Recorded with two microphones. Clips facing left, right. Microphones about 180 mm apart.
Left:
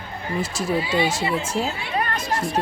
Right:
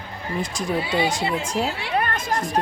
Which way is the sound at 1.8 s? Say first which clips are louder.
Right 2 dB; 75° right (ahead or behind).